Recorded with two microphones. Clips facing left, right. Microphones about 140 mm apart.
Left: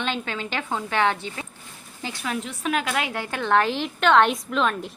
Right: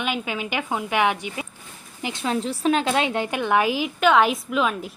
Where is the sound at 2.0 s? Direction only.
25° right (ahead or behind).